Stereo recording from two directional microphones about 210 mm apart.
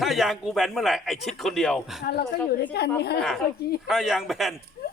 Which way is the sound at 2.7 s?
50° left (ahead or behind).